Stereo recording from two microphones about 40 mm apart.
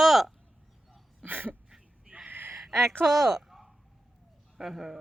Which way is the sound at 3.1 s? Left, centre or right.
Centre.